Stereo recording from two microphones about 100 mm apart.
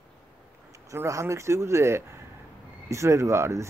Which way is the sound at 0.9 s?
30° right (ahead or behind).